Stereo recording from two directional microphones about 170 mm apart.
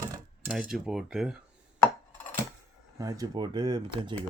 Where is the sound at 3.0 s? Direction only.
20° right (ahead or behind).